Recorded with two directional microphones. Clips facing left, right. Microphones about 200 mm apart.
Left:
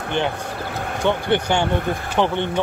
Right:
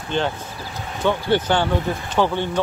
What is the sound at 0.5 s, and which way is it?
Basketball bounce, 65° left (ahead or behind).